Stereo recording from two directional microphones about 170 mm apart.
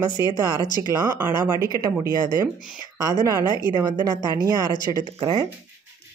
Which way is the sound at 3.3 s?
25° left (ahead or behind).